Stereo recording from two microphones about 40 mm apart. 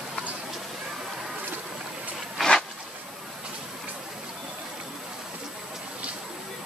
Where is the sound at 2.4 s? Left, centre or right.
Centre.